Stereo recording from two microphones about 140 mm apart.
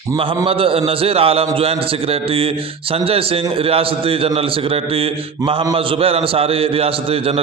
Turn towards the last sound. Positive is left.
turn(degrees=-45)  # may be behind; listen again after turning